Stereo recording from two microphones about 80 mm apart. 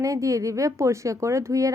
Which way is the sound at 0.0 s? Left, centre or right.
Right.